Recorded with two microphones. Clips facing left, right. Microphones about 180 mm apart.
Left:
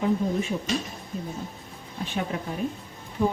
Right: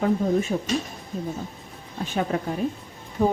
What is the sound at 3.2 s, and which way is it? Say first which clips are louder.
Speech: right 3 dB; 45° right (ahead or behind).